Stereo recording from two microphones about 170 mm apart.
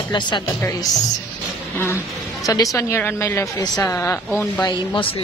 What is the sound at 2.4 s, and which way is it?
A woman's voice, 20° left (ahead or behind).